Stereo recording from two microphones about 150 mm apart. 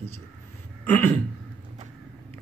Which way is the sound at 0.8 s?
10° left (ahead or behind).